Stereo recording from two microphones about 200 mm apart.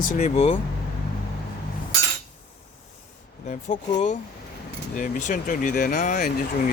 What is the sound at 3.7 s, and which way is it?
Speech, 40° left (ahead or behind).